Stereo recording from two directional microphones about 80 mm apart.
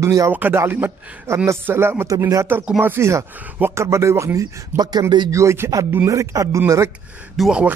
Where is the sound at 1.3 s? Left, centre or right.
Right.